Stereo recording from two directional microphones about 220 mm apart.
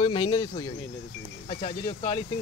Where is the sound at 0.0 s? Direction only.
20° left (ahead or behind).